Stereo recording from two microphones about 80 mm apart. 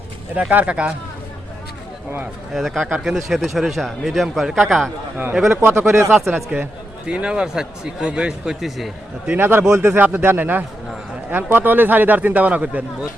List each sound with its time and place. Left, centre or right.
0.5 s speech: centre
2.5 s speech: centre
5.5 s speech: right
6.3 s speech: right
7.1 s a man's voice: centre
9.4 s speech: right